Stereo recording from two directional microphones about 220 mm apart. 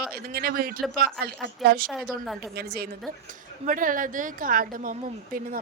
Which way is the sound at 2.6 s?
45° right (ahead or behind).